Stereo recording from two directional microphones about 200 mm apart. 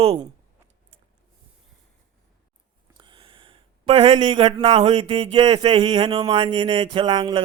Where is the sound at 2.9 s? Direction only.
25° right (ahead or behind).